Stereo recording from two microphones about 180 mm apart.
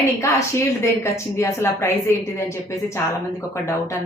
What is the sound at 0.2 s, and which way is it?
A woman's voice, 15° left (ahead or behind).